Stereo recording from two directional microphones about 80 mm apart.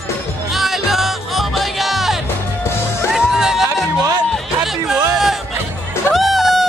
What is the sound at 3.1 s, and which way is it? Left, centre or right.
Music, centre.